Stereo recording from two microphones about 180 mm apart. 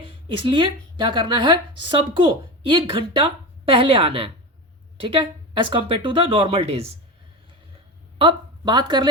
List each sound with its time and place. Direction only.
0.3 s speech: 30° right (ahead or behind)
8.2 s speech: 25° right (ahead or behind)